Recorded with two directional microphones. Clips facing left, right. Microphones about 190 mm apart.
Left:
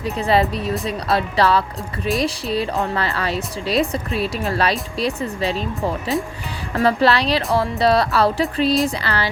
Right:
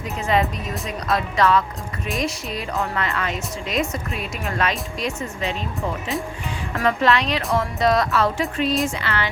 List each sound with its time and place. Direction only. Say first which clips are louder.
0.0 s a woman's voice: left 3 dB; 35° left (ahead or behind)